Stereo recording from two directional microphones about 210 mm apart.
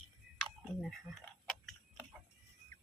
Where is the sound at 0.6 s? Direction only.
Centre (ahead or behind).